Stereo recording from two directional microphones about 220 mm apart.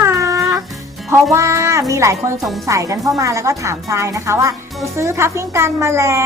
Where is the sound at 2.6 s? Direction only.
15° right (ahead or behind).